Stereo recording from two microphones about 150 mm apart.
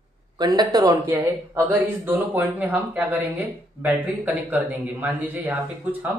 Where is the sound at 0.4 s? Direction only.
25° right (ahead or behind).